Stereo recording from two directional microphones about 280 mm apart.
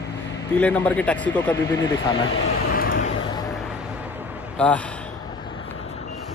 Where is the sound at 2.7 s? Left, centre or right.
Left.